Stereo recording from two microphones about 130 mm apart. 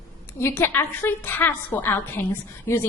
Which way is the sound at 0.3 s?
20° left (ahead or behind).